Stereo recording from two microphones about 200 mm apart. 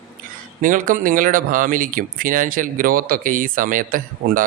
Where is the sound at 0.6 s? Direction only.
40° right (ahead or behind).